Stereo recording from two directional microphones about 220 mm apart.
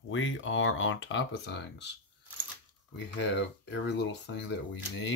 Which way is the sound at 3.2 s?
50° left (ahead or behind).